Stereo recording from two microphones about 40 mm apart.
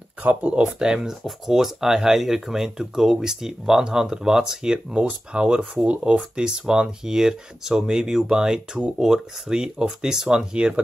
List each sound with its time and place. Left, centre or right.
0.3 s speech: right
0.7 s speech: centre
10.5 s speech: right